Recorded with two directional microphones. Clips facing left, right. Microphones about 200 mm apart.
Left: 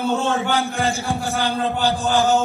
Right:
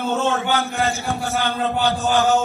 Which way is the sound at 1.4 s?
35° left (ahead or behind).